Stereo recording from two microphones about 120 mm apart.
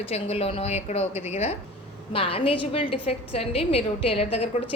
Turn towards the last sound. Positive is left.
turn(degrees=55)  # may be behind; listen again after turning